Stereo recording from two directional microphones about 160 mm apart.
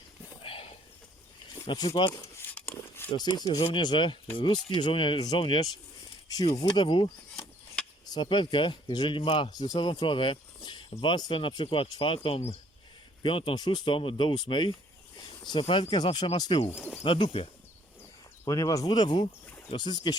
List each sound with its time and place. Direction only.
0.4 s a sound: 35° left (ahead or behind)
1.5 s speech: 30° left (ahead or behind)
2.6 s a sound: 15° left (ahead or behind)
3.1 s speech: 25° left (ahead or behind)
16.7 s speech: 10° left (ahead or behind)
17.0 s speech: 30° left (ahead or behind)
18.4 s speech: 20° left (ahead or behind)